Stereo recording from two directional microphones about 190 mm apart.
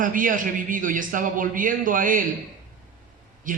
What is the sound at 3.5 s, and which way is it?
Speech, 45° right (ahead or behind).